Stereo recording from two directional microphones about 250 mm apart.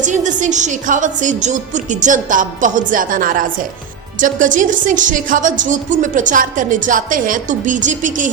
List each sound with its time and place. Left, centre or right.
0.0 s speech: right